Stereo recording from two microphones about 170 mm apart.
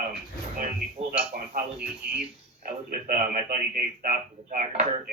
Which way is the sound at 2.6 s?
55° right (ahead or behind).